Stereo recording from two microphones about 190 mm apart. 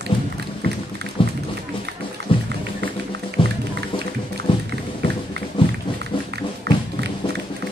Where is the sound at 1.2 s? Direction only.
30° left (ahead or behind).